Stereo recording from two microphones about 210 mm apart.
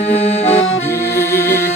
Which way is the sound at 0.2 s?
30° left (ahead or behind).